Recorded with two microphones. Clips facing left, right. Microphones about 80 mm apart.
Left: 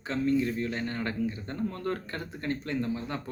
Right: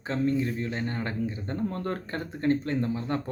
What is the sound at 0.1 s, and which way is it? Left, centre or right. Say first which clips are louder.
Speech: even; right.